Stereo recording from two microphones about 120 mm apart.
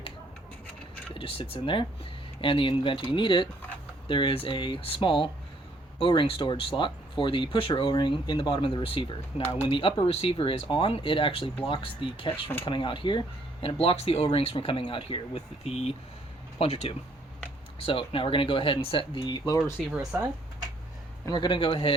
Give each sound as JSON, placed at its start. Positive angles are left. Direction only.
{"t": 1.1, "sound": "speech", "side_deg": 50}
{"t": 10.1, "sound": "speech", "side_deg": 55}
{"t": 17.7, "sound": "speech", "side_deg": 50}
{"t": 20.1, "sound": "speech", "side_deg": -10}
{"t": 21.2, "sound": "speech", "side_deg": 40}